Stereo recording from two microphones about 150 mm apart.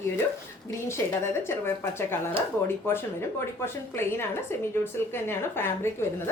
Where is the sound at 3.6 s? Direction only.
15° left (ahead or behind).